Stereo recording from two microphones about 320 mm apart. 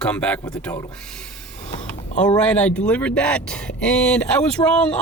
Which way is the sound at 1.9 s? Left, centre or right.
Centre.